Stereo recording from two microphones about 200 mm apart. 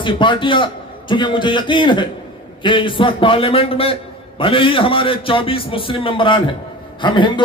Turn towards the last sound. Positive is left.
turn(degrees=25)  # may be behind; listen again after turning